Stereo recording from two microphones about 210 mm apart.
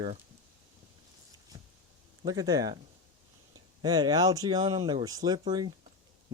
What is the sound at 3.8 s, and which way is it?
Speech, 20° right (ahead or behind).